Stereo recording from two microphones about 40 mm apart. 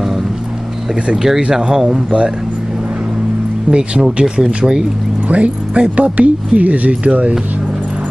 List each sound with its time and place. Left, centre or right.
1.1 s speech: centre
3.7 s speech: right
5.3 s speech: right